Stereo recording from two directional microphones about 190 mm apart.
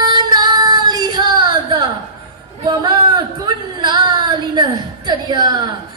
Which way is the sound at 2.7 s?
25° right (ahead or behind).